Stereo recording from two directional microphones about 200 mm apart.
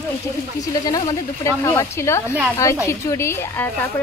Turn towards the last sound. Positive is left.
turn(degrees=10)  # may be behind; listen again after turning